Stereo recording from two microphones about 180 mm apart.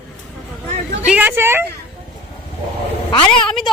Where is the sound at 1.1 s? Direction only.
10° right (ahead or behind).